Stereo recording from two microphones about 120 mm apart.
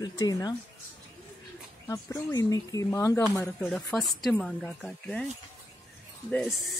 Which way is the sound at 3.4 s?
5° left (ahead or behind).